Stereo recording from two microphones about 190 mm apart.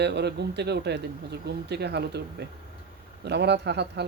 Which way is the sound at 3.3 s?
60° right (ahead or behind).